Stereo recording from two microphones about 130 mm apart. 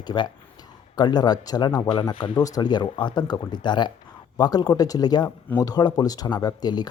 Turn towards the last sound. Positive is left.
turn(degrees=30)  # may be behind; listen again after turning